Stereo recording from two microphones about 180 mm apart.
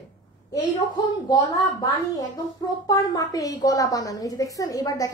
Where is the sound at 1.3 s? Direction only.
20° left (ahead or behind).